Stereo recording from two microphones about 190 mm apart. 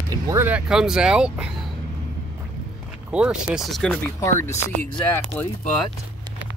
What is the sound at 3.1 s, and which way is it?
Speech, 5° right (ahead or behind).